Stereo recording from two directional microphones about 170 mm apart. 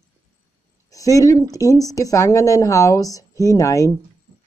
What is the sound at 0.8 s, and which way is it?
Speech, 20° left (ahead or behind).